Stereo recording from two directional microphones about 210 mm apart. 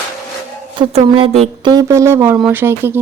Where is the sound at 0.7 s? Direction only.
25° right (ahead or behind); by 3.0 s 10° right (ahead or behind).